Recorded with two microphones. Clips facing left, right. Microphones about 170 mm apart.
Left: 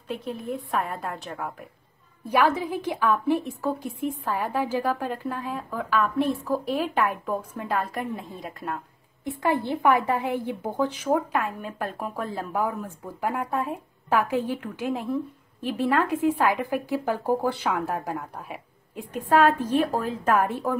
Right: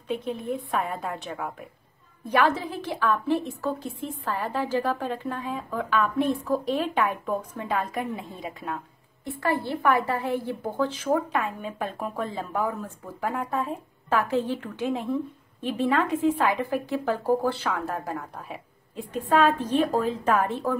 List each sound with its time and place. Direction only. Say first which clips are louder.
0.1 s a woman's voice: right 2 dB; centre (ahead or behind)
9.2 s speech: left 2 dB; 15° left (ahead or behind)
11.1 s speech: even; 5° left (ahead or behind)